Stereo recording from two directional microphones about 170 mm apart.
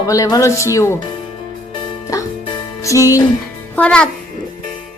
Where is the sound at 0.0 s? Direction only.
20° left (ahead or behind).